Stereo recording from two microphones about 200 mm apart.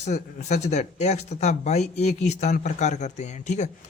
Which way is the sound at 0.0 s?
35° left (ahead or behind).